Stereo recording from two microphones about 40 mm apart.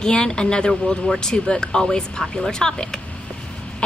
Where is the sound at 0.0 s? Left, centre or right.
Centre.